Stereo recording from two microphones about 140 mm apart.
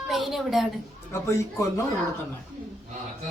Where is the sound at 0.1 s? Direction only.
Centre (ahead or behind).